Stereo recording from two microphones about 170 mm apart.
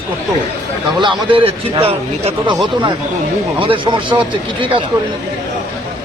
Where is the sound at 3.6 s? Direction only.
30° right (ahead or behind).